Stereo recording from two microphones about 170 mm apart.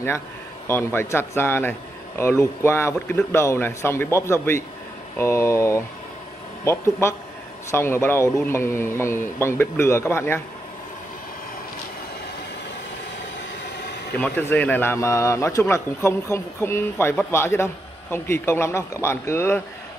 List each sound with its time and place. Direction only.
0.7 s a man's voice: 15° left (ahead or behind)
14.1 s a man's voice: 10° left (ahead or behind)